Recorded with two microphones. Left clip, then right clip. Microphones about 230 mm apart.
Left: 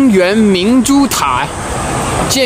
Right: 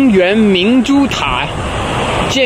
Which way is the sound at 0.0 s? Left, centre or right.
Centre.